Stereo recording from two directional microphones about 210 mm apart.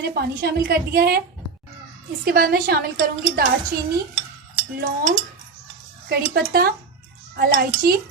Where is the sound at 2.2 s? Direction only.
45° right (ahead or behind).